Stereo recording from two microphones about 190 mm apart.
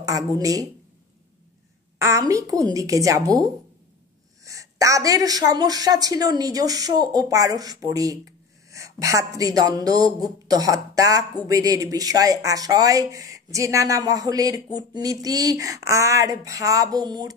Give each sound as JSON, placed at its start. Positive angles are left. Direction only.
{"t": 0.0, "sound": "speech", "side_deg": -20}
{"t": 2.0, "sound": "speech", "side_deg": -15}